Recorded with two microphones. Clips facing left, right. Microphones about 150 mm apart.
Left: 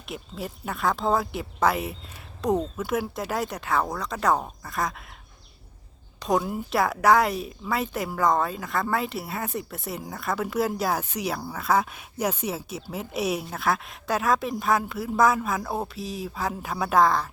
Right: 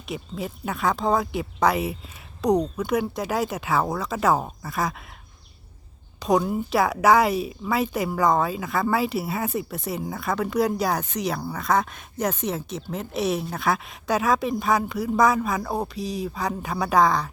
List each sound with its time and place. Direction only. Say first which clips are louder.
0.1 s speech: right 3 dB; centre (ahead or behind)
6.1 s speech: right 3 dB; centre (ahead or behind)